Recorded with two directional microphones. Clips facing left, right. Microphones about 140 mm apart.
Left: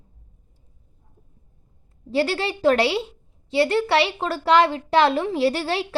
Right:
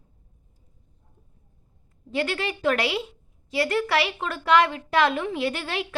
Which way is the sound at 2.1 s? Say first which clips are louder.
Left 4 dB; 35° left (ahead or behind).